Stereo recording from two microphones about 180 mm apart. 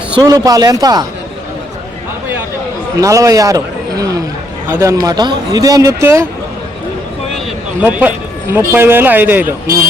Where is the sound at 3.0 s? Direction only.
15° right (ahead or behind).